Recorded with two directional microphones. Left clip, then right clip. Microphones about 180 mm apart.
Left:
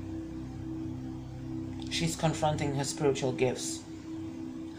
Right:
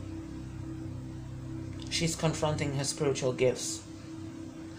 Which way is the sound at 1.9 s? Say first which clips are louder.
Even; 20° right (ahead or behind).